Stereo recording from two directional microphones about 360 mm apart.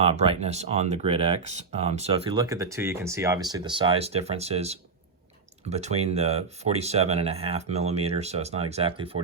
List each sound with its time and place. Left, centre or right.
0.0 s speech: centre